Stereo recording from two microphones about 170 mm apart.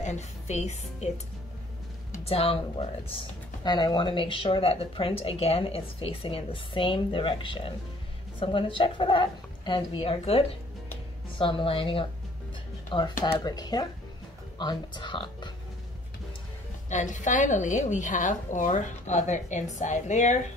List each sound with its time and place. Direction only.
0.0 s speech: 40° left (ahead or behind)
2.2 s a woman's voice: 35° left (ahead or behind)
13.2 s a woman's voice: 25° left (ahead or behind)
16.9 s a woman's voice: 45° left (ahead or behind)